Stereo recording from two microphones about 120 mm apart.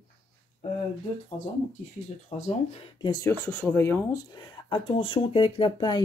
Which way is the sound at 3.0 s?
30° left (ahead or behind).